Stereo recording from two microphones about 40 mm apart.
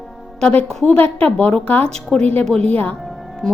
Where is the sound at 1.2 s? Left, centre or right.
Left.